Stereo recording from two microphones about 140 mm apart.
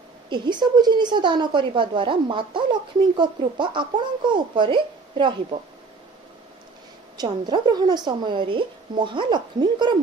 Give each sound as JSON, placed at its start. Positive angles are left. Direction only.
{"t": 0.3, "sound": "a woman's voice", "side_deg": -35}
{"t": 7.2, "sound": "a woman's voice", "side_deg": -30}